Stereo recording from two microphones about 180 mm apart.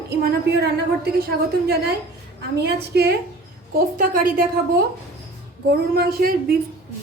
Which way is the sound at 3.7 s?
50° right (ahead or behind).